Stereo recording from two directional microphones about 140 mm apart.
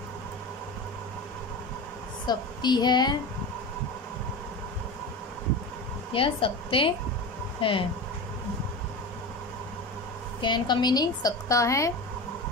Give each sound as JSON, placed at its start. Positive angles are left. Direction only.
{"t": 2.2, "sound": "a woman's voice", "side_deg": 30}
{"t": 6.1, "sound": "a woman's voice", "side_deg": 40}
{"t": 10.4, "sound": "a woman's voice", "side_deg": 30}